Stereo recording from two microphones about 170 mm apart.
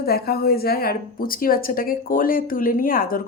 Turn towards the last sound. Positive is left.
turn(degrees=55)  # may be behind; listen again after turning